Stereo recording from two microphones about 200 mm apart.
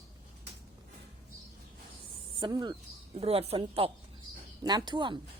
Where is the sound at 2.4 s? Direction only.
20° right (ahead or behind).